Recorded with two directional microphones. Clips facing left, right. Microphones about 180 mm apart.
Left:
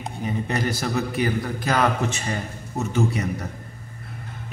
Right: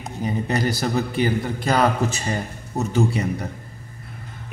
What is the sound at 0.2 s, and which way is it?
A man's voice, 35° right (ahead or behind).